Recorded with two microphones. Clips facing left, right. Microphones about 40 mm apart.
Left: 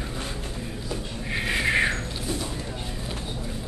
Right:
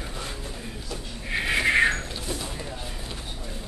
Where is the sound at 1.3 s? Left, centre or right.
Centre.